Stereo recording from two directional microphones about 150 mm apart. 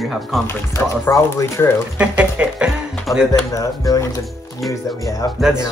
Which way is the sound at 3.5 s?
25° left (ahead or behind).